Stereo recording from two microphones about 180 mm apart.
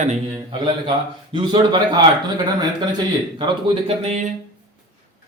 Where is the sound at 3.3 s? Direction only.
25° right (ahead or behind).